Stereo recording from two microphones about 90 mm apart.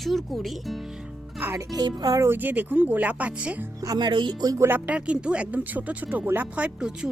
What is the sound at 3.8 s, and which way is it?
Music, 50° right (ahead or behind).